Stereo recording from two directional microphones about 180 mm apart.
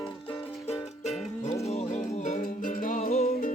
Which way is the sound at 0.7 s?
35° left (ahead or behind).